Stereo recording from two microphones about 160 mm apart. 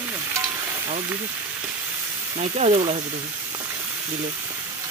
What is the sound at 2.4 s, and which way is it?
Speech, 45° right (ahead or behind).